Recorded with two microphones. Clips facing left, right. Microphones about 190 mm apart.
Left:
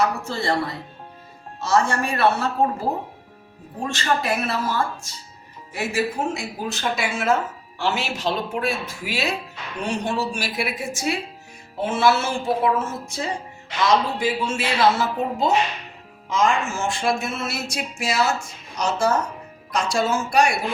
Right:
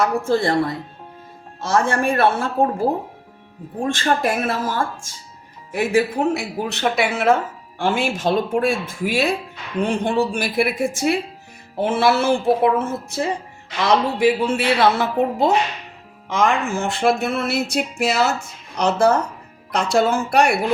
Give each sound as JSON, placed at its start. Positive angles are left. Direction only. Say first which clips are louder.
{"t": 0.2, "sound": "speech", "louder": "right 7 dB", "side_deg": -50}
{"t": 1.6, "sound": "speech", "louder": "right 2 dB", "side_deg": -55}
{"t": 3.8, "sound": "speech", "louder": "right 3 dB", "side_deg": -50}
{"t": 7.8, "sound": "speech", "louder": "right 4 dB", "side_deg": -50}